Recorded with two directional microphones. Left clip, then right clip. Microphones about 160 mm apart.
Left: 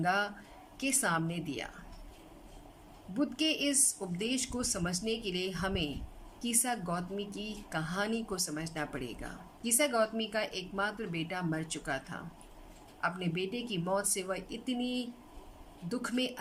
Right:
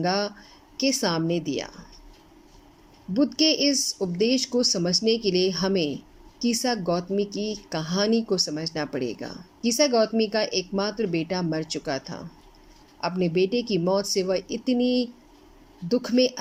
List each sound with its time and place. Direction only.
0.0 s a woman's voice: 25° right (ahead or behind)
3.2 s a woman's voice: 25° right (ahead or behind)